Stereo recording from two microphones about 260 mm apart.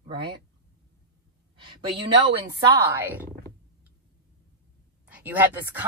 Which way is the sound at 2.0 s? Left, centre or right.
Centre.